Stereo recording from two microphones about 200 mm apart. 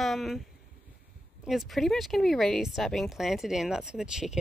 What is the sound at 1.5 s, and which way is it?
Speech, centre (ahead or behind).